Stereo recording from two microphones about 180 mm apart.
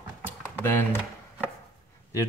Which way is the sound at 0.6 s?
10° left (ahead or behind).